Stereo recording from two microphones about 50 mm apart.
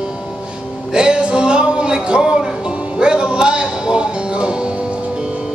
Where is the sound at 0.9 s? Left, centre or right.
Centre.